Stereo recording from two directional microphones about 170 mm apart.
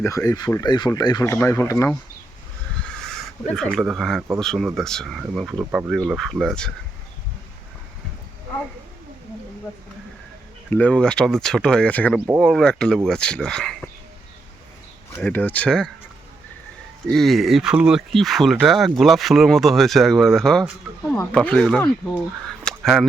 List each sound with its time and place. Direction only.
0.0 s speech: 15° left (ahead or behind)
3.5 s speech: centre (ahead or behind)
10.7 s speech: 10° left (ahead or behind)
12.1 s speech: 5° right (ahead or behind)
15.1 s speech: 10° left (ahead or behind)
17.1 s speech: centre (ahead or behind)
22.6 s fowl: centre (ahead or behind)